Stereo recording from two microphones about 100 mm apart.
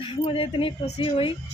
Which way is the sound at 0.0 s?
65° left (ahead or behind).